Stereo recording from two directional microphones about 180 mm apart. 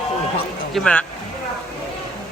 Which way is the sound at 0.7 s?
5° left (ahead or behind).